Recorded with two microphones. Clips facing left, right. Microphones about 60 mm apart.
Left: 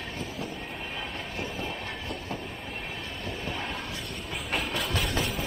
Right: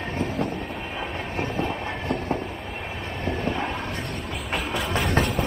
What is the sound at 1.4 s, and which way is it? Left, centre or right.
Train, right.